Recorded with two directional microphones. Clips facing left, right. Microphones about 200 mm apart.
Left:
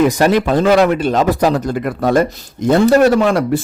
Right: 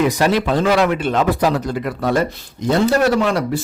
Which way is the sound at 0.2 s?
50° left (ahead or behind).